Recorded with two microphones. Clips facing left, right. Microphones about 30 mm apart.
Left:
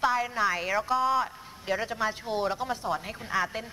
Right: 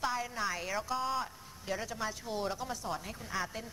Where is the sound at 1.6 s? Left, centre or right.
Left.